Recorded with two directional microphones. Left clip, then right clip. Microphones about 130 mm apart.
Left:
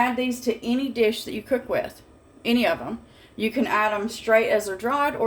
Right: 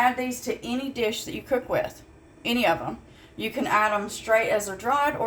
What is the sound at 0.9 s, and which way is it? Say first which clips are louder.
A woman's voice: left 5 dB; 25° left (ahead or behind).